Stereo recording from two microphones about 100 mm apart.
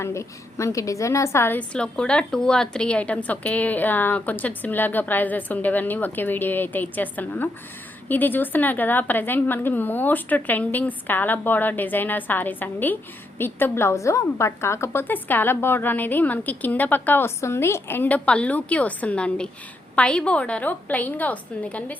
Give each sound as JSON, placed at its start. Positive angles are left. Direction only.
{"t": 0.0, "sound": "a woman's voice", "side_deg": 30}
{"t": 1.5, "sound": "a woman's voice", "side_deg": 10}